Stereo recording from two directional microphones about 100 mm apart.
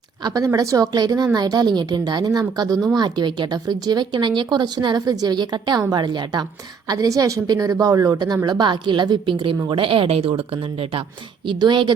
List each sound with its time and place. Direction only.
0.2 s a woman's voice: 40° right (ahead or behind); by 11.0 s 70° right (ahead or behind)
11.4 s a woman's voice: 50° right (ahead or behind)